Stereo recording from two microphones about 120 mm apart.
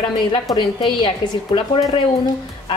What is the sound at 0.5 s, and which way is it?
A woman's voice, 40° left (ahead or behind).